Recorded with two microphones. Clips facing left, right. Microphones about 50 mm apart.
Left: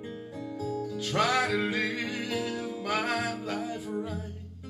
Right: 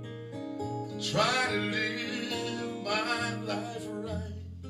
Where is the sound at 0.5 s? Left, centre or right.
Centre.